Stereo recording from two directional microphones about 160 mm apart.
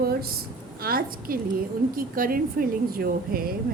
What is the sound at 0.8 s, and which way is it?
A woman's voice, 65° right (ahead or behind).